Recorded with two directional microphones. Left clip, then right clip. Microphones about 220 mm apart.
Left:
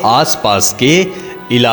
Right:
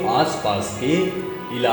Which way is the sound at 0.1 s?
45° left (ahead or behind).